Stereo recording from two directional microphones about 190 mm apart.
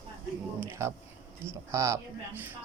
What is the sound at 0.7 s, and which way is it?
Speech, 15° right (ahead or behind).